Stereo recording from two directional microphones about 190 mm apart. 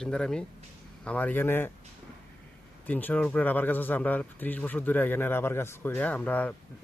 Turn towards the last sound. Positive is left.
turn(degrees=5)  # may be behind; listen again after turning